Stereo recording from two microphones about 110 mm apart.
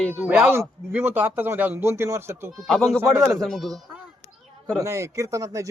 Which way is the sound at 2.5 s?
5° left (ahead or behind).